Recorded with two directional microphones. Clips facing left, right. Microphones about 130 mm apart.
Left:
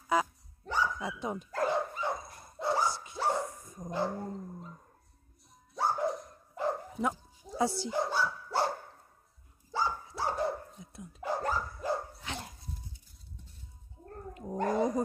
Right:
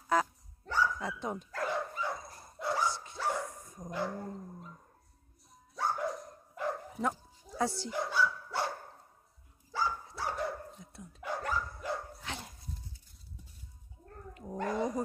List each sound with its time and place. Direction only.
0.1 s dog: 10° left (ahead or behind)
1.5 s dog: 30° left (ahead or behind)
2.9 s dog: 10° left (ahead or behind)
3.2 s dog: 30° left (ahead or behind)
5.8 s dog: 30° left (ahead or behind)
7.0 s bow-wow: 10° left (ahead or behind)
7.9 s dog: 30° left (ahead or behind)
10.8 s dog: 10° left (ahead or behind)
11.1 s dog: 35° left (ahead or behind)
12.3 s dog: centre (ahead or behind)
14.0 s dog: 35° left (ahead or behind)
14.3 s cat: 20° left (ahead or behind)
14.6 s speech: 35° left (ahead or behind)